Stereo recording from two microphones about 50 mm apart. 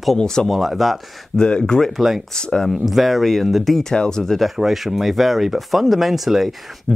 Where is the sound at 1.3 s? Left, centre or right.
Centre.